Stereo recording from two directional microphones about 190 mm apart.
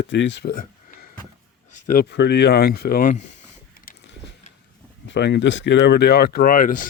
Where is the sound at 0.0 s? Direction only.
70° left (ahead or behind).